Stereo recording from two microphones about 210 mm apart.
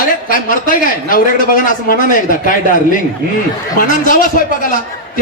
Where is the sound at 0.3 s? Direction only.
40° left (ahead or behind).